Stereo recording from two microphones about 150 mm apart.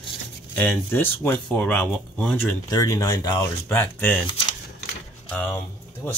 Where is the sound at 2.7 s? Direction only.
20° left (ahead or behind).